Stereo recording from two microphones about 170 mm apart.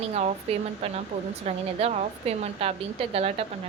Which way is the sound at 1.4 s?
40° right (ahead or behind).